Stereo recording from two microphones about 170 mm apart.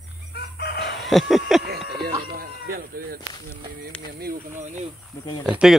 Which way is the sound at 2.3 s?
60° right (ahead or behind).